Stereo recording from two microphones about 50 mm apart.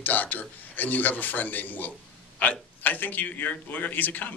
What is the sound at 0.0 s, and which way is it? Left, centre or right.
A man's voice, left.